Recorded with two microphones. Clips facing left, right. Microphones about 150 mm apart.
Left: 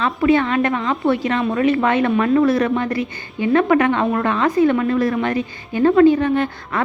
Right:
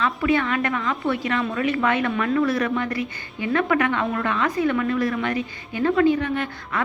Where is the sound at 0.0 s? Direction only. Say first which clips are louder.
Left 5 dB; 30° left (ahead or behind).